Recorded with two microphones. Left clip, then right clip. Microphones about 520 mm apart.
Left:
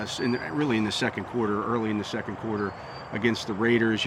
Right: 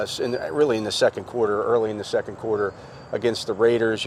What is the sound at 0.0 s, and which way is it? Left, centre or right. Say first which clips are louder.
Speech: right 4 dB; right.